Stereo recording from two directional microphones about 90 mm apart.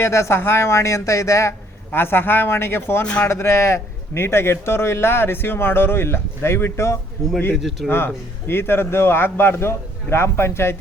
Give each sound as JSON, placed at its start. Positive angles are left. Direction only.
{"t": 0.0, "sound": "a man's voice", "side_deg": 30}